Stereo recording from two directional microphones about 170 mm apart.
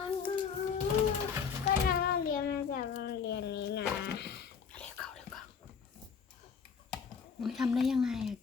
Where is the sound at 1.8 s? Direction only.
60° left (ahead or behind); by 4.5 s 85° left.